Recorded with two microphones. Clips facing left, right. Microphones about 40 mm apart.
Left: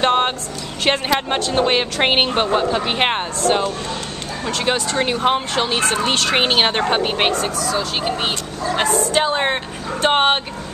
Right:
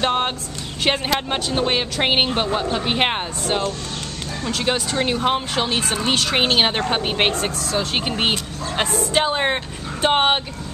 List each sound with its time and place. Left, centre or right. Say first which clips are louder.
0.0 s a sound: left 4 dB; centre
0.8 s speech: left 2 dB; centre
4.5 s speech: left 2 dB; centre
7.7 s speech: left 1 dB; right
9.1 s speech: left 1 dB; centre